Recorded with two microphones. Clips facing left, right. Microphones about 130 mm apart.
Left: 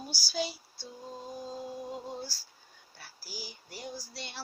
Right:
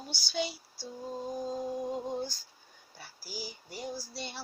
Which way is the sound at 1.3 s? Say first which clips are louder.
Right 5 dB; 15° right (ahead or behind).